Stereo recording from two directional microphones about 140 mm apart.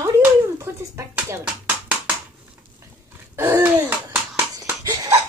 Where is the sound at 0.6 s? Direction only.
20° right (ahead or behind).